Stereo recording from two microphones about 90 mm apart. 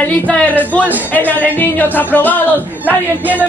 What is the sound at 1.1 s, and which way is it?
Music, 20° left (ahead or behind).